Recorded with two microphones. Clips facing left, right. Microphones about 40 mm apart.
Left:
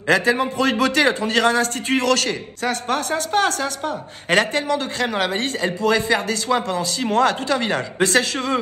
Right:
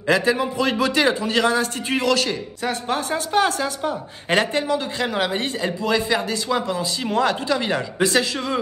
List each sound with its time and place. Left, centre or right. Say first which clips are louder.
0.1 s a man's voice: left 1 dB; left
6.5 s speech: left 3 dB; centre
7.0 s a man's voice: left 3 dB; left